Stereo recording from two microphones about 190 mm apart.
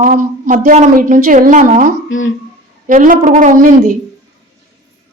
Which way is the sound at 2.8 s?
45° right (ahead or behind).